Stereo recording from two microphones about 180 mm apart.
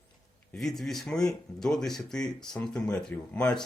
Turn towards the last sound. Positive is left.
turn(degrees=5)  # may be behind; listen again after turning